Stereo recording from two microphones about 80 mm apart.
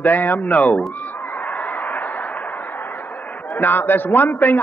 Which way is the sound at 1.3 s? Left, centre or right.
Centre.